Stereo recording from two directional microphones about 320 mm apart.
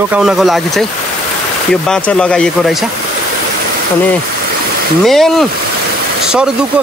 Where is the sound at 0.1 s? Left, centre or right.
Centre.